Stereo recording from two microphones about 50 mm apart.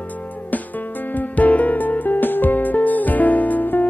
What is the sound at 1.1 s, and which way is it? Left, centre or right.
Music, left.